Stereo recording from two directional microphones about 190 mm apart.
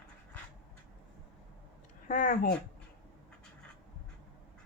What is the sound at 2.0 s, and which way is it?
Speech, 45° left (ahead or behind).